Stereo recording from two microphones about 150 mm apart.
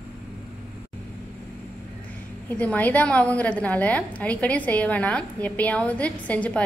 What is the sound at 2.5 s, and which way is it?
A woman's voice, 10° left (ahead or behind).